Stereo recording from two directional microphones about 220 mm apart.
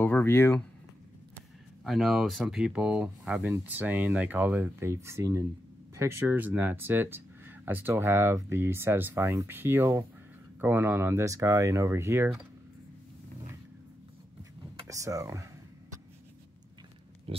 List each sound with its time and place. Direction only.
0.0 s speech: 10° left (ahead or behind)
1.9 s speech: centre (ahead or behind)
14.8 s speech: 15° right (ahead or behind)
17.3 s a sound: 25° right (ahead or behind)